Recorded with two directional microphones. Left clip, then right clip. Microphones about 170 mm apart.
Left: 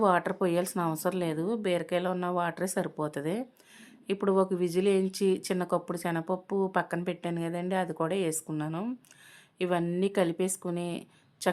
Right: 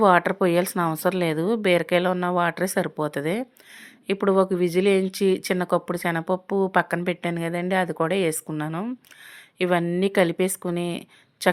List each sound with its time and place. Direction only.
0.0 s a woman's voice: 25° right (ahead or behind)